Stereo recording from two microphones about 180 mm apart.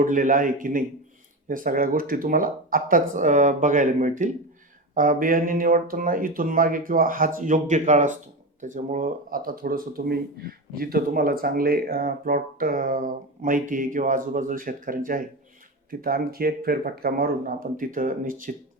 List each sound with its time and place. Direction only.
0.0 s speech: 45° right (ahead or behind)